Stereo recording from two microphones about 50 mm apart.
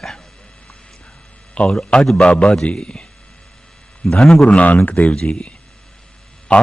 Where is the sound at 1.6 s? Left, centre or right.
Left.